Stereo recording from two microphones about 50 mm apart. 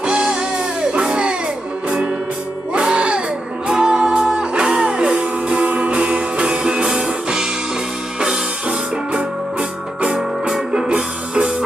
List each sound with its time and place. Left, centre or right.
0.0 s music: centre
2.7 s music: right